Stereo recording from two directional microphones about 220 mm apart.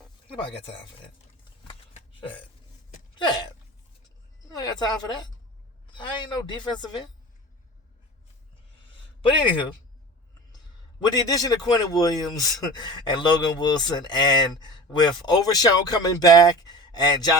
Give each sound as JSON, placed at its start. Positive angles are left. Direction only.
{"t": 1.6, "sound": "burping", "side_deg": 20}
{"t": 3.2, "sound": "hiccup", "side_deg": 20}
{"t": 4.5, "sound": "a woman's voice", "side_deg": 20}
{"t": 8.9, "sound": "a sound", "side_deg": 20}
{"t": 11.0, "sound": "a man's voice", "side_deg": 15}